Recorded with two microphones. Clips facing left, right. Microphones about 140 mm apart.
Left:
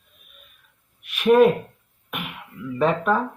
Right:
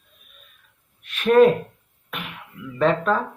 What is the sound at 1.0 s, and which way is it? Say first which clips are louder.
Speech: even; 10° left (ahead or behind).